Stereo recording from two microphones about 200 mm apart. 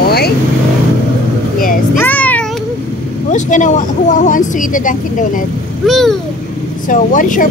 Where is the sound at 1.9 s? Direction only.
10° left (ahead or behind).